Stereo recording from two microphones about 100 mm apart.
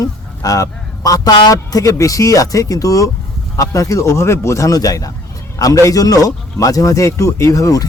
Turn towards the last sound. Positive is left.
turn(degrees=35)  # may be behind; listen again after turning